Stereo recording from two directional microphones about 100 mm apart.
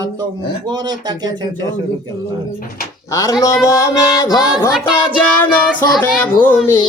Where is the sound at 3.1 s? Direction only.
35° left (ahead or behind).